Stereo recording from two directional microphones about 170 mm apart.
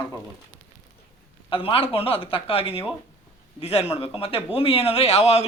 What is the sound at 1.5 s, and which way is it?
A man's voice, 35° left (ahead or behind).